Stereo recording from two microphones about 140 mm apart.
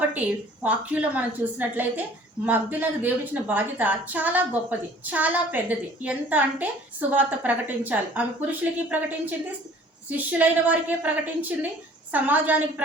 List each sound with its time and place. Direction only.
0.1 s a woman's voice: 10° right (ahead or behind)